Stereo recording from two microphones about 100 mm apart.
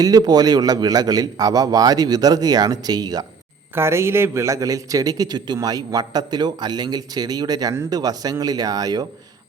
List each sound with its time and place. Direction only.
0.0 s a man's voice: 40° right (ahead or behind)
3.8 s a man's voice: 25° right (ahead or behind); by 9.0 s 40° right (ahead or behind)